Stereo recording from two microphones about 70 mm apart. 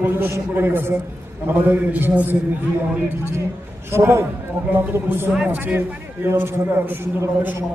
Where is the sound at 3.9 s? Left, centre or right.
Right.